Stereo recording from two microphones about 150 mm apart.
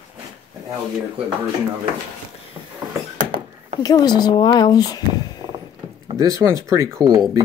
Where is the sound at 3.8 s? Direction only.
25° left (ahead or behind).